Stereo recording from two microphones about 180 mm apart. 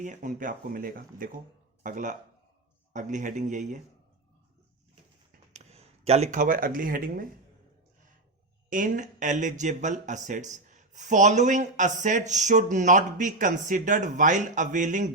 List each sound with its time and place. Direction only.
0.0 s speech: 45° right (ahead or behind)
5.3 s a sound: 35° right (ahead or behind)
8.7 s speech: 45° right (ahead or behind)